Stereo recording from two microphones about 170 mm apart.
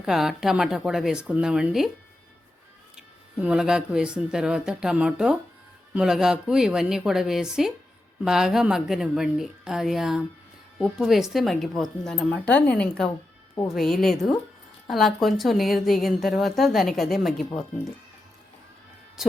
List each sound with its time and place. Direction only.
0.0 s a woman's voice: 5° right (ahead or behind)
3.4 s a woman's voice: 5° right (ahead or behind)